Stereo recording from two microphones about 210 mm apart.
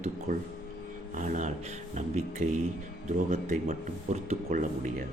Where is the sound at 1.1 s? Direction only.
35° right (ahead or behind).